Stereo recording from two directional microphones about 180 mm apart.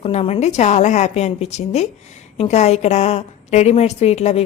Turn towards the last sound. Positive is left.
turn(degrees=35)  # may be behind; listen again after turning